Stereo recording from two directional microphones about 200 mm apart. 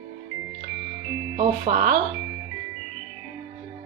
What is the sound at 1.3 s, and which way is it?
Speech, 40° right (ahead or behind).